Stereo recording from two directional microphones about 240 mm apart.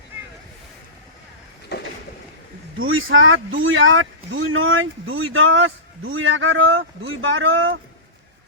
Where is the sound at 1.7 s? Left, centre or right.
Left.